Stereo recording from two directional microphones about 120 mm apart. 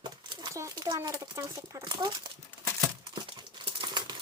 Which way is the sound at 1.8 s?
40° right (ahead or behind).